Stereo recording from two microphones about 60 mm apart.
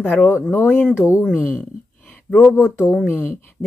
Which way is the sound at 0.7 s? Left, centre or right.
Left.